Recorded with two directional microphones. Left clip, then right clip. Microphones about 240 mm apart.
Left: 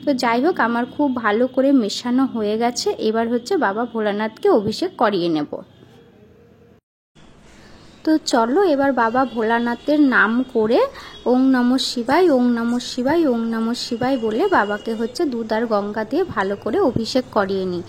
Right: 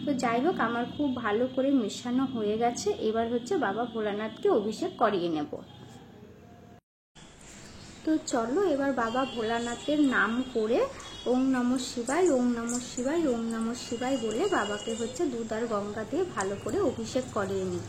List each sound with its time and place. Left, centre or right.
0.0 s speech: left
8.0 s speech: left